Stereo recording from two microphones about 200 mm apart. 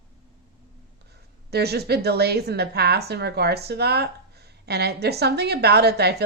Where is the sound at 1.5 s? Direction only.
55° right (ahead or behind).